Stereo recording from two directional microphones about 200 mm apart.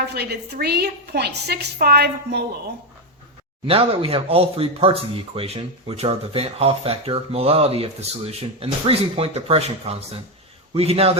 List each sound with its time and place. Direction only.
0.1 s a woman's voice: 55° right (ahead or behind)
3.7 s a man's voice: 30° right (ahead or behind)